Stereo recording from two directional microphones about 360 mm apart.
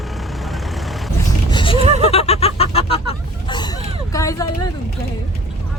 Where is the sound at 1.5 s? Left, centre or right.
Centre.